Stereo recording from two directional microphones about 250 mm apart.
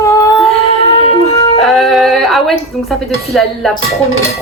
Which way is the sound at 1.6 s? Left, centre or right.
Centre.